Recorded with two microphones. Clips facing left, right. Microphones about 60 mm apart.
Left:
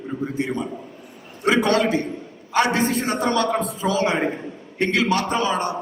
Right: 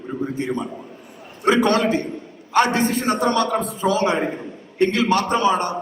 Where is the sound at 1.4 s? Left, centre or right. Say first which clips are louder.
Right 1 dB; right.